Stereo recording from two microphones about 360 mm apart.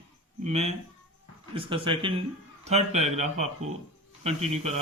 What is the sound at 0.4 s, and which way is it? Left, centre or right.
A man's voice, centre.